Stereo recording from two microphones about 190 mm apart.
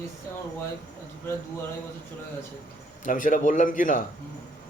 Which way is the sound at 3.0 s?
45° left (ahead or behind).